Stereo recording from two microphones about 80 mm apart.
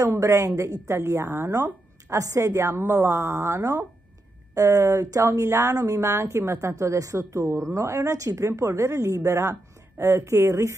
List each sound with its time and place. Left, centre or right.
0.0 s speech: right